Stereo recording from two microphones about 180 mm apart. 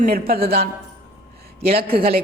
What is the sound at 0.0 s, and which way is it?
Speech, 55° right (ahead or behind).